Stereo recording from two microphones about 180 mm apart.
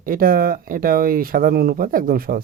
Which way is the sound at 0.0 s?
55° right (ahead or behind).